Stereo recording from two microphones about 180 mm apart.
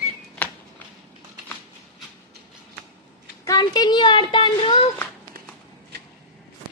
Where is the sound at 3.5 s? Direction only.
20° left (ahead or behind).